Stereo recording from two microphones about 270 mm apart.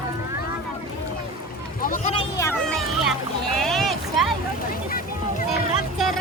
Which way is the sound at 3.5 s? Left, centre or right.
Centre.